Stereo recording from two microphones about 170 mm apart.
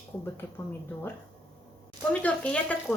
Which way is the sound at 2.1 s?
10° left (ahead or behind).